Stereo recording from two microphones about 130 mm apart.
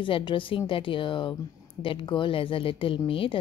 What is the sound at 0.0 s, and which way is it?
A woman's voice, 40° left (ahead or behind).